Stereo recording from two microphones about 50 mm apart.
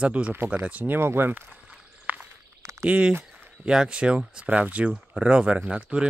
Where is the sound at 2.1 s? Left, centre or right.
Right.